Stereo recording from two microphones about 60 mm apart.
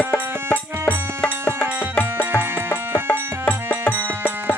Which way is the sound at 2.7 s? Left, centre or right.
Left.